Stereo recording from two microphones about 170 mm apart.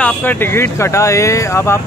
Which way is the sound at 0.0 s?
10° left (ahead or behind).